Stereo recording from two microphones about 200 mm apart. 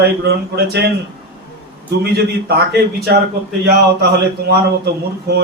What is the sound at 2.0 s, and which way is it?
A man's voice, 55° right (ahead or behind).